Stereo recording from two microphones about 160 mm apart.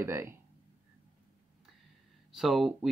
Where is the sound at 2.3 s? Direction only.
Centre (ahead or behind).